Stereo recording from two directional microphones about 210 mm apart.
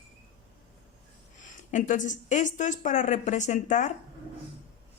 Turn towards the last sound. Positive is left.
turn(degrees=35)  # may be behind; listen again after turning